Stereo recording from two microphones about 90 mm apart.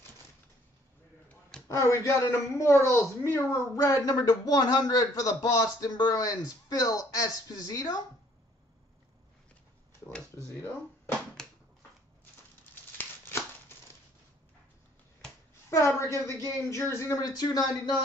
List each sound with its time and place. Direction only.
1.7 s a man's voice: 30° left (ahead or behind)
10.3 s speech: 25° left (ahead or behind)
11.4 s a sound: 5° left (ahead or behind)
12.9 s crumpling: 25° left (ahead or behind)
15.7 s a man's voice: 35° left (ahead or behind)
17.2 s speech: 45° left (ahead or behind)